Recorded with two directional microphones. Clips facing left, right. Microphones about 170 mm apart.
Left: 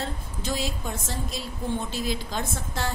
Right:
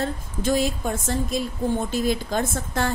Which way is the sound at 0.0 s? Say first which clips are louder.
Right 7 dB; 50° right (ahead or behind).